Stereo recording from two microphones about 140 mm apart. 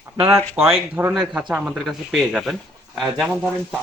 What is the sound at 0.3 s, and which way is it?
Speech, 15° right (ahead or behind).